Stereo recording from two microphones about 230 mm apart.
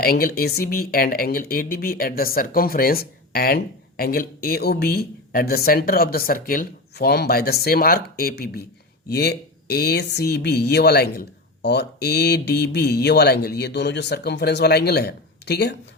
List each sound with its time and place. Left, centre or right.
0.0 s speech: left